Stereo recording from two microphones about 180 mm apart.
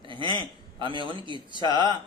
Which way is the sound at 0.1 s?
25° right (ahead or behind).